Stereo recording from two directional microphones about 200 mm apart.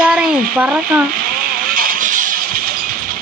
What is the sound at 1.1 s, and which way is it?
Vehicle, 45° right (ahead or behind).